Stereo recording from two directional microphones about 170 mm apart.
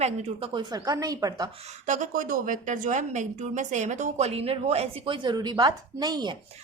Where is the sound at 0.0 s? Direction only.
35° right (ahead or behind); by 1.5 s 20° right (ahead or behind).